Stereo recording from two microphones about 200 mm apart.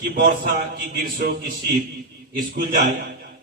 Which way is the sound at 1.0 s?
60° right (ahead or behind).